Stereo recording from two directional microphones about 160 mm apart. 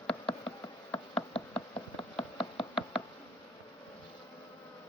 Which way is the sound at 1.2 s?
30° left (ahead or behind).